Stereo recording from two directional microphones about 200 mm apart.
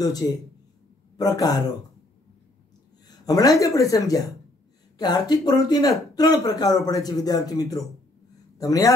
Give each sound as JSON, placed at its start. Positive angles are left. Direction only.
{"t": 0.0, "sound": "speech", "side_deg": 20}
{"t": 3.1, "sound": "speech", "side_deg": 20}